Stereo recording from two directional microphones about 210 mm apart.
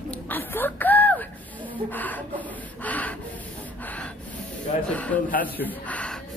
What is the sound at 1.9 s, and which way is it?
Speech, 10° left (ahead or behind).